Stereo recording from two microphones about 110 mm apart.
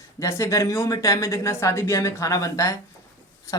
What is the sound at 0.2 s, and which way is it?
Speech, 25° left (ahead or behind).